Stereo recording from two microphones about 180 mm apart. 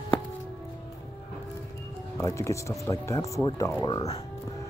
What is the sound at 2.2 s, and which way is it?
Speech, 15° left (ahead or behind).